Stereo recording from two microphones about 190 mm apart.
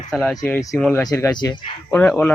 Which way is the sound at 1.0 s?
20° left (ahead or behind).